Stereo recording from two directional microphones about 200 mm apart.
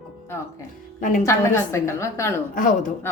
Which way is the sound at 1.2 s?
15° left (ahead or behind).